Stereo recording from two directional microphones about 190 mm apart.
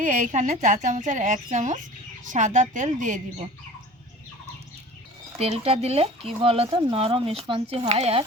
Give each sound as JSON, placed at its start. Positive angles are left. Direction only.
{"t": 0.0, "sound": "speech", "side_deg": -45}
{"t": 5.4, "sound": "speech", "side_deg": -30}